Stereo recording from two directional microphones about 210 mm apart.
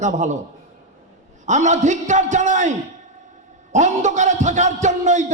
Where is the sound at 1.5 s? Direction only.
35° right (ahead or behind).